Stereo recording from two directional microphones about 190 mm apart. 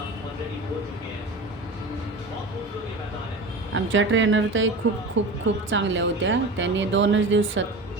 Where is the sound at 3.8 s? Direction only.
85° right.